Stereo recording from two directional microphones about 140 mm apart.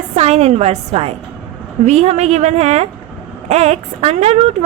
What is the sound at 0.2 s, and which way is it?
A woman's voice, 50° right (ahead or behind).